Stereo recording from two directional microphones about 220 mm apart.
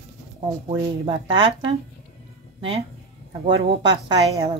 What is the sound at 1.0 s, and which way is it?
Speech, 20° right (ahead or behind).